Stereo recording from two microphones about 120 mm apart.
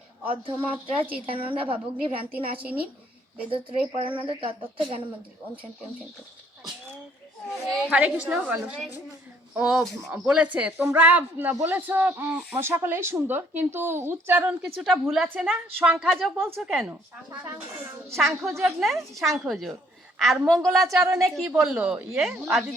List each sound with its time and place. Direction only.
0.3 s a woman's voice: 50° right (ahead or behind)
3.5 s a woman's voice: 50° right (ahead or behind)
7.5 s speech: centre (ahead or behind)
7.9 s speech: 10° right (ahead or behind)
15.0 s speech: centre (ahead or behind)
18.1 s a woman's voice: centre (ahead or behind)
20.8 s speech: 25° right (ahead or behind)
21.3 s speech: centre (ahead or behind)
21.8 s speech: 10° right (ahead or behind)